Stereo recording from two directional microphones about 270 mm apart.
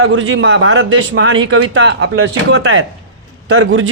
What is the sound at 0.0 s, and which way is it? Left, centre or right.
A man's voice, right.